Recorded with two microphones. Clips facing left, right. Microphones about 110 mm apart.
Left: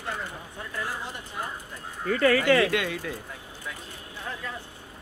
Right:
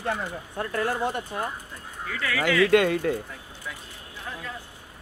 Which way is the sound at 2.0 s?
40° left (ahead or behind).